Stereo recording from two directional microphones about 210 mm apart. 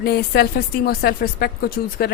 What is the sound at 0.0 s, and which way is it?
Speech, 50° left (ahead or behind).